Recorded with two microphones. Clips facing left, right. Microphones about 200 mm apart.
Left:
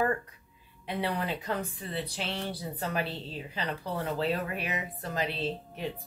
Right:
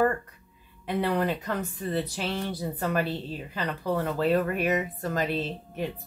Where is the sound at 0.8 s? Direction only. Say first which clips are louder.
Right 6 dB; 55° right (ahead or behind).